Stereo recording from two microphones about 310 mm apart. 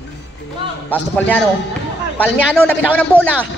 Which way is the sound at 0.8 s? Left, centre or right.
Centre.